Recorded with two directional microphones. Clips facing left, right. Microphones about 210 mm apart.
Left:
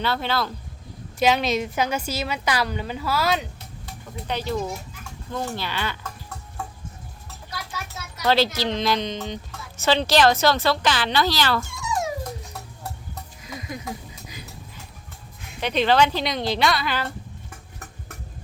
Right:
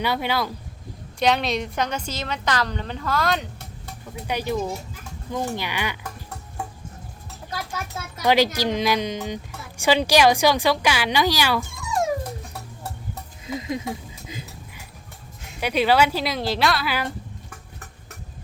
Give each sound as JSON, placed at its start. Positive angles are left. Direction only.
{"t": 0.0, "sound": "speech", "side_deg": -15}
{"t": 1.2, "sound": "a woman's voice", "side_deg": 0}
{"t": 4.3, "sound": "speech", "side_deg": -10}
{"t": 8.2, "sound": "speech", "side_deg": -15}
{"t": 11.7, "sound": "dog", "side_deg": -50}
{"t": 13.4, "sound": "a sound", "side_deg": -25}
{"t": 15.6, "sound": "speech", "side_deg": -10}